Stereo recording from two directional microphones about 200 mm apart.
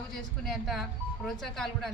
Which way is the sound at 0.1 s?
Centre (ahead or behind).